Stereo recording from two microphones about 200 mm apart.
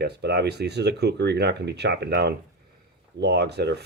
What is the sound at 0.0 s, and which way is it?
Speech, 55° right (ahead or behind).